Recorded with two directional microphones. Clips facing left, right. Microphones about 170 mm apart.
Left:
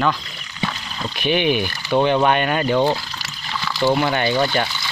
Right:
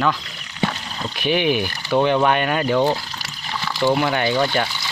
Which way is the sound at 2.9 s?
20° right (ahead or behind).